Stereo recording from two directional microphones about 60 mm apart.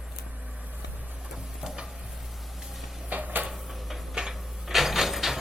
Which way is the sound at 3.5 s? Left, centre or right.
Centre.